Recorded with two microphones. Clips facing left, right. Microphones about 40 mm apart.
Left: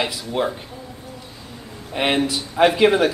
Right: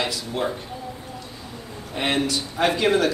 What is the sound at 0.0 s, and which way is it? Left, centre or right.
Speech, centre.